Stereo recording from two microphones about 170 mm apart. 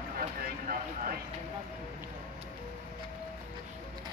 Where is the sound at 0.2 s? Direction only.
55° right (ahead or behind).